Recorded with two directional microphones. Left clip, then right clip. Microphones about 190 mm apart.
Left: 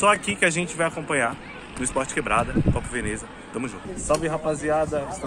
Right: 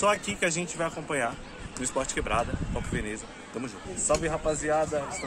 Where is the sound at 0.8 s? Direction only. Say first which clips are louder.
Left 6 dB; 15° left (ahead or behind).